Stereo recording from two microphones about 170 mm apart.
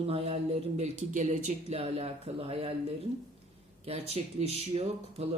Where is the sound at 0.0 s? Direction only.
35° right (ahead or behind).